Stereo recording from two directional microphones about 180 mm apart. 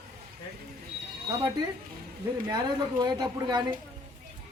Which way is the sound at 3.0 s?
25° right (ahead or behind).